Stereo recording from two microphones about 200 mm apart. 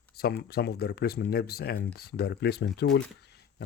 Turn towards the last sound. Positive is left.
turn(degrees=65)  # may be behind; listen again after turning